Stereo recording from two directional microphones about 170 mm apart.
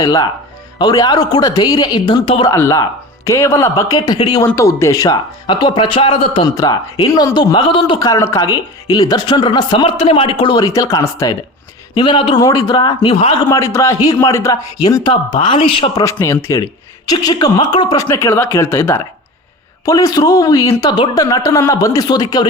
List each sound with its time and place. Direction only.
0.0 s speech: 25° left (ahead or behind)
2.5 s speech: 15° left (ahead or behind); by 6.5 s 35° left (ahead or behind)
7.1 s speech: 20° left (ahead or behind)
13.5 s speech: 20° left (ahead or behind)
16.0 s speech: 15° left (ahead or behind)